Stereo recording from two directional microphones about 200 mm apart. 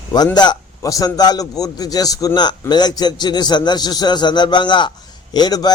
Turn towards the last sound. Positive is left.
turn(degrees=20)  # may be behind; listen again after turning